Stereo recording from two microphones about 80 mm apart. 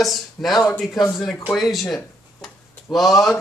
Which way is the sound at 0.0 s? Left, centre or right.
Centre.